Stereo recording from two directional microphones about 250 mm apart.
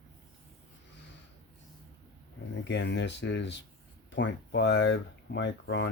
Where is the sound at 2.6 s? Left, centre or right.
Left.